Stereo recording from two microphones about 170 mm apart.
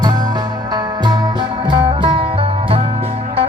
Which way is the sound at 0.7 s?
25° right (ahead or behind).